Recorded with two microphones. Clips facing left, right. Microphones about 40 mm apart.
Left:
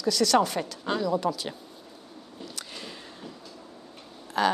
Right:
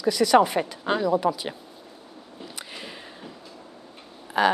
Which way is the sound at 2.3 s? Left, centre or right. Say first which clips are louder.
Right 2 dB; centre.